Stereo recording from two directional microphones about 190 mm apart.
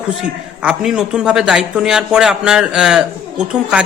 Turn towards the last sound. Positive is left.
turn(degrees=-5)  # may be behind; listen again after turning